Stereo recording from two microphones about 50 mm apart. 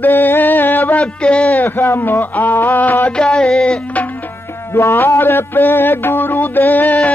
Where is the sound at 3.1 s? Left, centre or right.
Centre.